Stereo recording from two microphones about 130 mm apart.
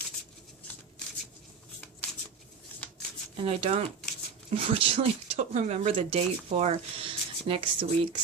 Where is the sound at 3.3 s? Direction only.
50° right (ahead or behind).